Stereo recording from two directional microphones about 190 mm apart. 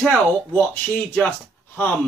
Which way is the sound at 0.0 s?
5° left (ahead or behind).